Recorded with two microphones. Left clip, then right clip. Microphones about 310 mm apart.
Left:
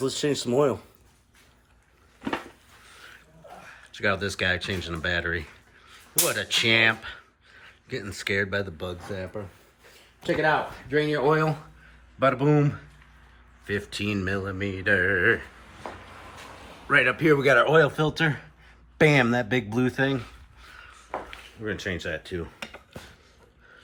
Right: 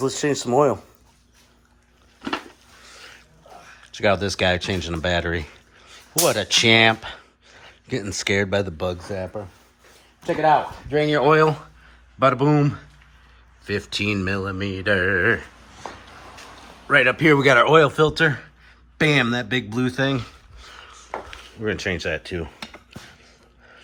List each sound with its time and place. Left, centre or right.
0.0 s a man's voice: centre
2.8 s a sound: centre
3.9 s speech: centre
10.9 s a man's voice: centre
16.9 s a man's voice: centre
20.6 s a sound: centre